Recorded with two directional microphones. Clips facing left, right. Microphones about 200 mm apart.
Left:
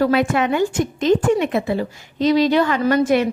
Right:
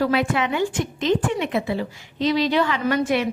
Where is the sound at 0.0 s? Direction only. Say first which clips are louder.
Left 4 dB; 45° left (ahead or behind).